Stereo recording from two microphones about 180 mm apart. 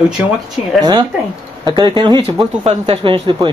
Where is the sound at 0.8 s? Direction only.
25° right (ahead or behind).